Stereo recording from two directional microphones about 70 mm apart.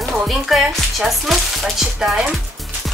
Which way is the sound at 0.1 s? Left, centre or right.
Centre.